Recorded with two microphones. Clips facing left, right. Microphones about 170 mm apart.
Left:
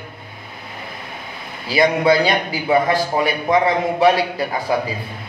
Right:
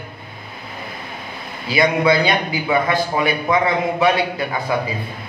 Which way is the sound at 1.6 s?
40° left (ahead or behind).